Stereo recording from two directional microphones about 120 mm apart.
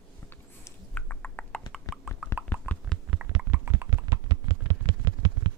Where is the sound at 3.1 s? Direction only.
10° right (ahead or behind).